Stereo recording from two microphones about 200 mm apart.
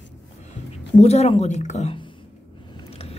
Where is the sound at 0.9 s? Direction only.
30° left (ahead or behind).